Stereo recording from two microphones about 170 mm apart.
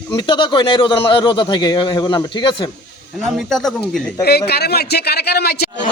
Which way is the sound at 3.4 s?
Centre (ahead or behind).